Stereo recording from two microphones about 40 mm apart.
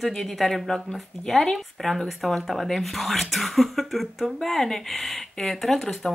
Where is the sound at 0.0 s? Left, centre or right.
Centre.